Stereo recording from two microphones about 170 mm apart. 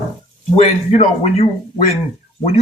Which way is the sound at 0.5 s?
35° left (ahead or behind).